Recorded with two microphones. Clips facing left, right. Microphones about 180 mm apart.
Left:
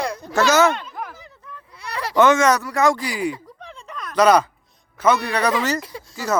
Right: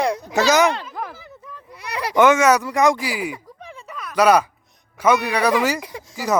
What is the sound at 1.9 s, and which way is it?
Speech, 15° right (ahead or behind).